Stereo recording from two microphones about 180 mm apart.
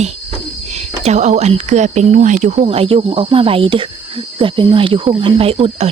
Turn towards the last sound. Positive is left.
turn(degrees=-35)  # may be behind; listen again after turning